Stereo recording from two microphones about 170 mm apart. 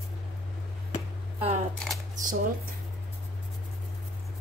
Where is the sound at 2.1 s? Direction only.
50° right (ahead or behind).